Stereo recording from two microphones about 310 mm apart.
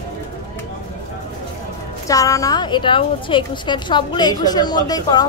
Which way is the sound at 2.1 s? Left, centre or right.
Centre.